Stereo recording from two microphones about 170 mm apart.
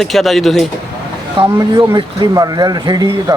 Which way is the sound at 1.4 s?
20° right (ahead or behind).